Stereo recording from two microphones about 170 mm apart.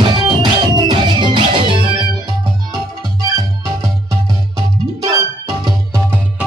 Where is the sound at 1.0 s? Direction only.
30° right (ahead or behind).